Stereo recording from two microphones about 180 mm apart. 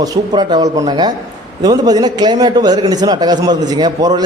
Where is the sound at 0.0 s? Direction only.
20° right (ahead or behind).